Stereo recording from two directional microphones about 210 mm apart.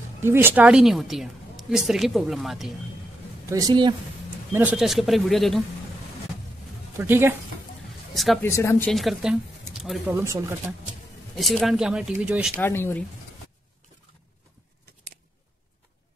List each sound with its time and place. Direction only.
0.2 s a woman's voice: 10° right (ahead or behind)
3.4 s speech: 15° right (ahead or behind)
4.6 s a woman's voice: 5° right (ahead or behind)
7.0 s speech: 10° right (ahead or behind)
8.1 s speech: centre (ahead or behind)
8.5 s speech: 15° left (ahead or behind)
8.9 s a woman's voice: centre (ahead or behind)
11.3 s a woman's voice: centre (ahead or behind)
12.5 s speech: 10° left (ahead or behind)